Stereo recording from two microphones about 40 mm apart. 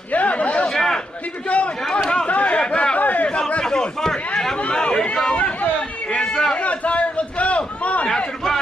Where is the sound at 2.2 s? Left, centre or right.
Left.